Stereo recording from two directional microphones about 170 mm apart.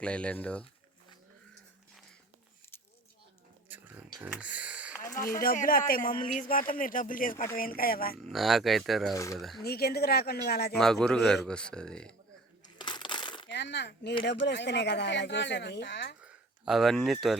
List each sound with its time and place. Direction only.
0.0 s speech: 5° left (ahead or behind)
3.7 s a sound: 10° right (ahead or behind)
5.1 s a man's voice: 55° left (ahead or behind)
8.3 s speech: centre (ahead or behind)
9.1 s speech: 20° left (ahead or behind)
9.4 s speech: centre (ahead or behind)
9.6 s speech: 65° left (ahead or behind)
10.8 s speech: 5° left (ahead or behind)
12.6 s coin: 25° left (ahead or behind)
13.5 s speech: 90° left
16.2 s a sound: centre (ahead or behind)